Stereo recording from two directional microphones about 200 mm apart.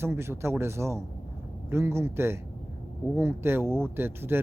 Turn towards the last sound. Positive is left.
turn(degrees=-10)  # may be behind; listen again after turning